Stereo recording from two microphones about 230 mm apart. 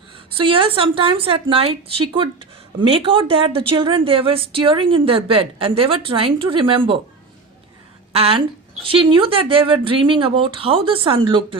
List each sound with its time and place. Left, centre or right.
0.3 s a woman's voice: right
2.8 s a woman's voice: right
8.1 s a woman's voice: right